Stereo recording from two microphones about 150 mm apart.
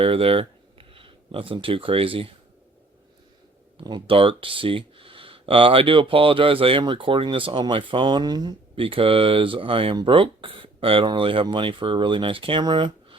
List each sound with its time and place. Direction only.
0.0 s speech: 35° right (ahead or behind)
3.8 s speech: 35° right (ahead or behind)